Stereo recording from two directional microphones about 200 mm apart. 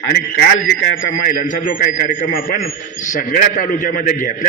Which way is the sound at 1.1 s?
45° left (ahead or behind).